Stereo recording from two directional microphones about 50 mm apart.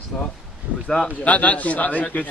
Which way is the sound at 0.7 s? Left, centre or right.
Right.